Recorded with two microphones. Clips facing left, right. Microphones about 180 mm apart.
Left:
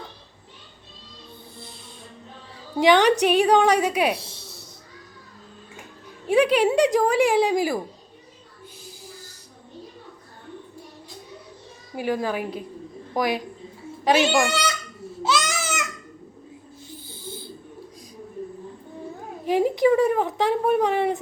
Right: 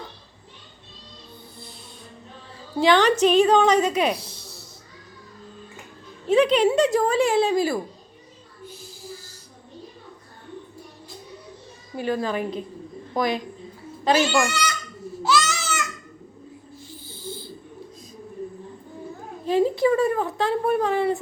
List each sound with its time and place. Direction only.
2.8 s speech: 15° left (ahead or behind)
6.2 s speech: 10° left (ahead or behind)
11.9 s a child's voice: 10° left (ahead or behind)
15.2 s baby cry: 20° left (ahead or behind)
19.5 s a sound: 15° left (ahead or behind)